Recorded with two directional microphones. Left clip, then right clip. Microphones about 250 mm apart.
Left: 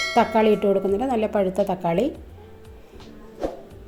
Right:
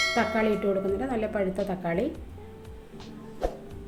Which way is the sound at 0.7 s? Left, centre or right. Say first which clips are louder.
Left 6 dB; left.